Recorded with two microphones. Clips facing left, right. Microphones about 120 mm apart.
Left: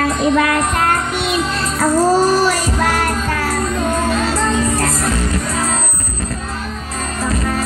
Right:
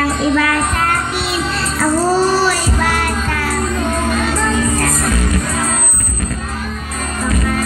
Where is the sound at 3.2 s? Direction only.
15° left (ahead or behind).